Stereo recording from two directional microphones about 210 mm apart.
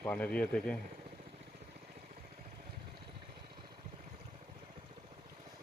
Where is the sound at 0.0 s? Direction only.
5° left (ahead or behind).